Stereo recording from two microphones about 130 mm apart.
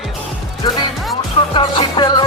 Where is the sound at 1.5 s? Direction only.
35° left (ahead or behind).